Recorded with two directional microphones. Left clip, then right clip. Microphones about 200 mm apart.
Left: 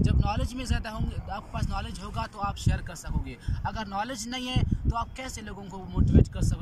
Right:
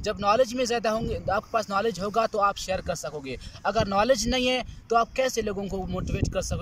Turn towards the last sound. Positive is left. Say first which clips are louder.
# left 1 dB
turn(degrees=-50)  # may be behind; listen again after turning